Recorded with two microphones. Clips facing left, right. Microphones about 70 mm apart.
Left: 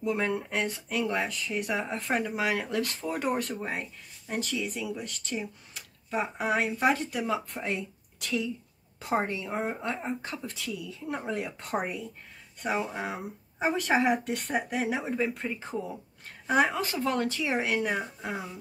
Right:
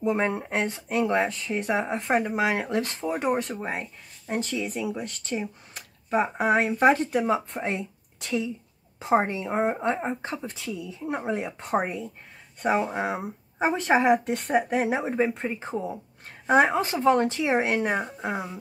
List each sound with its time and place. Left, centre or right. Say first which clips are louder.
0.0 s speech: right 4 dB; right